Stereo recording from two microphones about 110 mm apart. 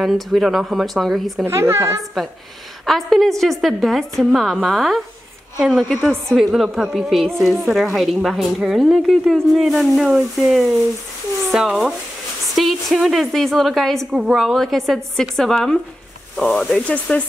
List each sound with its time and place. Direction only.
0.0 s a woman's voice: centre (ahead or behind)
1.4 s a woman's voice: 25° right (ahead or behind)
2.2 s a woman's voice: centre (ahead or behind)